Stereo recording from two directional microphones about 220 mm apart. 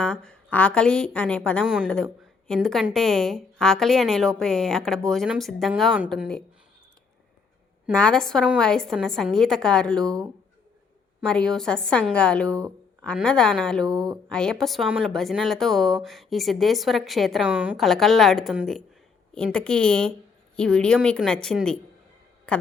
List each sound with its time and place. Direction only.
0.0 s a woman's voice: 5° left (ahead or behind)
7.9 s a woman's voice: 5° left (ahead or behind)
11.2 s a woman's voice: 5° left (ahead or behind)
12.5 s speech: 15° right (ahead or behind)
13.0 s a woman's voice: 5° left (ahead or behind)
13.8 s speech: 15° right (ahead or behind)
14.3 s a woman's voice: 5° left (ahead or behind)